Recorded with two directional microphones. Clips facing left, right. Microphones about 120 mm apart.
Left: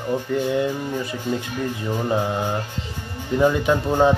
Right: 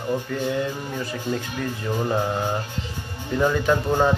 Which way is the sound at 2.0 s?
10° left (ahead or behind).